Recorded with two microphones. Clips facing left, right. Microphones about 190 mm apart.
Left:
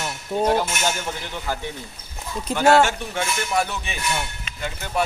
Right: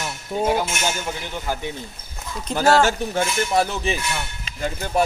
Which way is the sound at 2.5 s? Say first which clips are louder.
Left 1 dB; 40° right (ahead or behind).